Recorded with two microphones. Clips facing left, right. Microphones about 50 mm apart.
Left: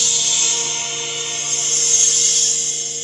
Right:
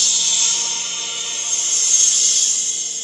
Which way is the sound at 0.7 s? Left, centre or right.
Left.